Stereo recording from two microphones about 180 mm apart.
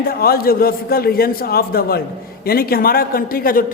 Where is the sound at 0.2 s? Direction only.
55° left (ahead or behind).